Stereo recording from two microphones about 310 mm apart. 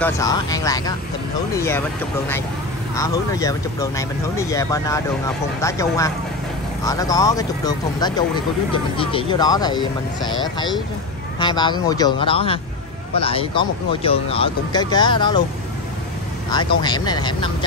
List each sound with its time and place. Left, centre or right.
0.0 s speech: centre
3.0 s speech: centre
16.4 s speech: centre